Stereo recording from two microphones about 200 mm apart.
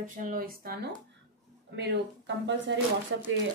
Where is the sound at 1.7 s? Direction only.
60° right (ahead or behind).